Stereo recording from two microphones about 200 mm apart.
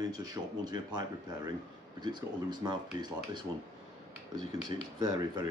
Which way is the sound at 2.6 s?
20° right (ahead or behind).